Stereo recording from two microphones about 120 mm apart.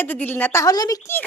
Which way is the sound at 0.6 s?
30° left (ahead or behind).